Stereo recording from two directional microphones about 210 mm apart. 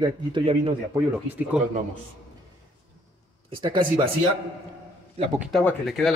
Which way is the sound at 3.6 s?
25° right (ahead or behind).